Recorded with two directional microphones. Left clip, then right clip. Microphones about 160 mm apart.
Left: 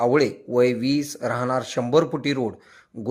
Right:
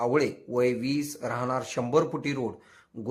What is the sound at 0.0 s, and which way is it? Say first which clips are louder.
Speech: left 6 dB; 20° left (ahead or behind).